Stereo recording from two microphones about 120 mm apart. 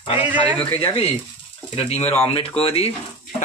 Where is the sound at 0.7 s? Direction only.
50° left (ahead or behind).